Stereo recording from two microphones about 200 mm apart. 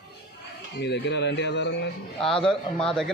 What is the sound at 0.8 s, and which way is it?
Speech, 60° left (ahead or behind).